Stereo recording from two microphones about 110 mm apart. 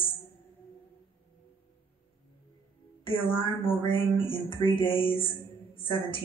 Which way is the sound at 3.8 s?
55° left (ahead or behind).